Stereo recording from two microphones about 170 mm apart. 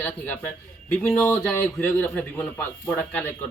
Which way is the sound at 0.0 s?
10° left (ahead or behind).